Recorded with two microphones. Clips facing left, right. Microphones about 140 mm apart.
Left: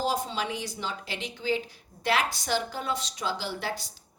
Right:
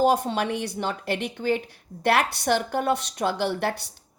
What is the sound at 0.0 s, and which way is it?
A woman's voice, 60° right (ahead or behind).